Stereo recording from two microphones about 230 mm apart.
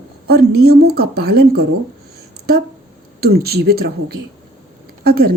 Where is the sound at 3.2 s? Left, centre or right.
Right.